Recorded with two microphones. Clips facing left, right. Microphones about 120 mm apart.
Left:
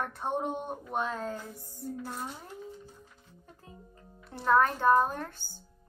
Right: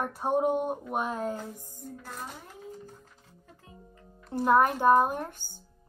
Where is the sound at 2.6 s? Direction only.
40° right (ahead or behind).